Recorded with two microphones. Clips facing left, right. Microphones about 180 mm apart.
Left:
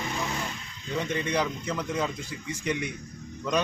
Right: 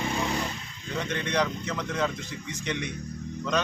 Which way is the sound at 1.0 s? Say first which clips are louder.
Right 1 dB; 10° left (ahead or behind).